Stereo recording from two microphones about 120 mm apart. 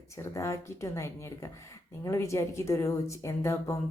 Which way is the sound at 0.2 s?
25° left (ahead or behind).